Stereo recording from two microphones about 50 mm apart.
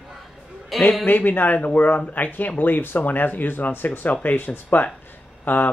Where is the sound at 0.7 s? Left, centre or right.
Centre.